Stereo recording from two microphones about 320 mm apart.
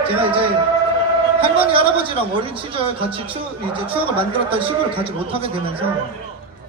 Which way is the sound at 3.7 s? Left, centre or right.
Centre.